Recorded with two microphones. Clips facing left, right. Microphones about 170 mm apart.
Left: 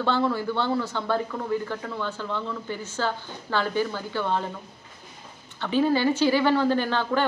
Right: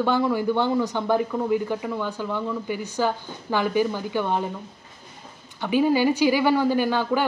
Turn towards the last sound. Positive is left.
turn(degrees=-10)  # may be behind; listen again after turning